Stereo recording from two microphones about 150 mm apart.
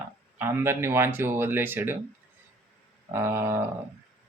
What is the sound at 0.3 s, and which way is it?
Speech, 15° right (ahead or behind).